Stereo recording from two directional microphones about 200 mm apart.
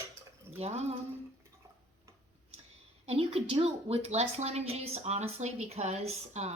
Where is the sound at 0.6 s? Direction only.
30° right (ahead or behind).